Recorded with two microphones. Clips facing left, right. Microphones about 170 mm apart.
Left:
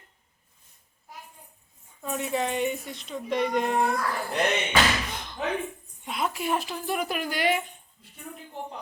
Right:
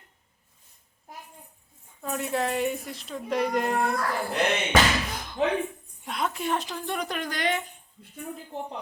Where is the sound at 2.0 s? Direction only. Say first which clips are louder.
Even; centre (ahead or behind).